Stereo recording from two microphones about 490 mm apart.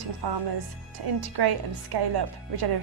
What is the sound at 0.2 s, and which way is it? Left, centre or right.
A woman's voice, right.